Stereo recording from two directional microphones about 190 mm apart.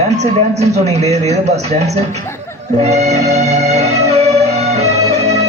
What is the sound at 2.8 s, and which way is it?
Music, 35° right (ahead or behind).